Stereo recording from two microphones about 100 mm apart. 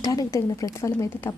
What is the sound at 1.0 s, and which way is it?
Speech, 20° left (ahead or behind).